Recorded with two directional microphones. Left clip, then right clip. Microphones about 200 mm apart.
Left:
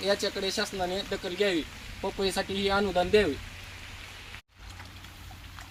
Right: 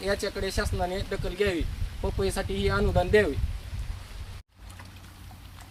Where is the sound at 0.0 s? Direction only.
Centre (ahead or behind).